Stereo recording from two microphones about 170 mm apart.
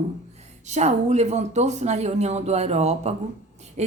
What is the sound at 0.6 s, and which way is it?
A woman's voice, 40° right (ahead or behind).